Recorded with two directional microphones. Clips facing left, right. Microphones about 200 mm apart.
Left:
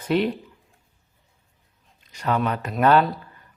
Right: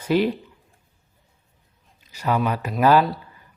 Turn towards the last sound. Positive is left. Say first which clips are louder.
# right 1 dB
turn(degrees=-5)  # may be behind; listen again after turning